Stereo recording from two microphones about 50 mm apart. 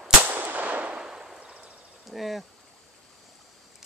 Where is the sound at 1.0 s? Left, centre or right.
Centre.